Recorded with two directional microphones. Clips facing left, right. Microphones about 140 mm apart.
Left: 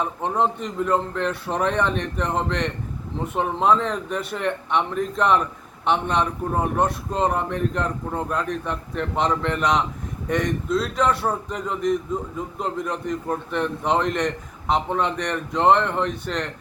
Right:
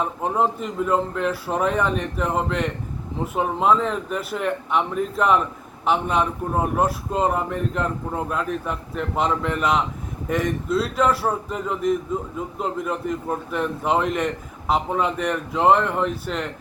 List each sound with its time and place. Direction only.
0.0 s a man's voice: 5° right (ahead or behind)